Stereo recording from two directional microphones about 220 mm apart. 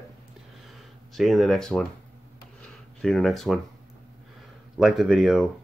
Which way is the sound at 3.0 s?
Centre (ahead or behind).